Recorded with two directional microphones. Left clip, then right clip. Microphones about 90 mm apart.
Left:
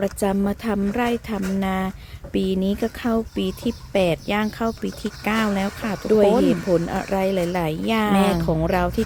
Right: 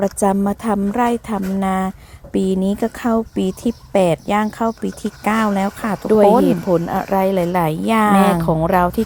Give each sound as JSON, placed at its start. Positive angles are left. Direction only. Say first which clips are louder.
{"t": 0.0, "sound": "speech", "louder": "right 5 dB", "side_deg": -40}